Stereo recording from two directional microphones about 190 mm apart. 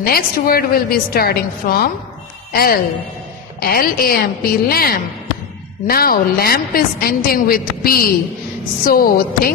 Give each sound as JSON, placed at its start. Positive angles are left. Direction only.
{"t": 0.0, "sound": "a woman's voice", "side_deg": 50}